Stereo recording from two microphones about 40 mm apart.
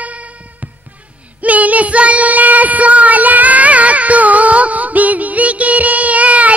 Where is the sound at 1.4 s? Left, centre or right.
Right.